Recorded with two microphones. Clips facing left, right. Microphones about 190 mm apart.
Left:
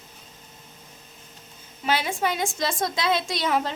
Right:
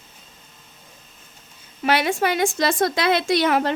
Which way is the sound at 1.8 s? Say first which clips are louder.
Right 5 dB; 70° right (ahead or behind).